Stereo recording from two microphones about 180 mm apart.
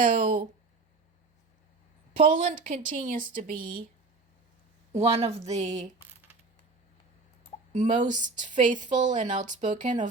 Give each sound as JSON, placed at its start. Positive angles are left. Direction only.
{"t": 0.0, "sound": "a woman's voice", "side_deg": -50}
{"t": 2.1, "sound": "a woman's voice", "side_deg": -45}
{"t": 4.9, "sound": "speech", "side_deg": -35}
{"t": 7.7, "sound": "a woman's voice", "side_deg": -40}